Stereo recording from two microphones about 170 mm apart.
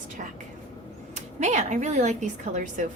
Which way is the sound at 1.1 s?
40° right (ahead or behind).